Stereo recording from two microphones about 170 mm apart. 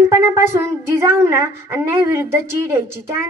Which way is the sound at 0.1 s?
15° right (ahead or behind).